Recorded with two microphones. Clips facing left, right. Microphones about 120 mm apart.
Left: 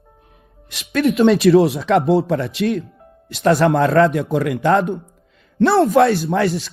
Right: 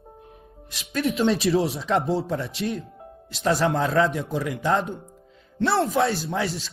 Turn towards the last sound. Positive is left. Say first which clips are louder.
# left 9 dB
turn(degrees=65)  # may be behind; listen again after turning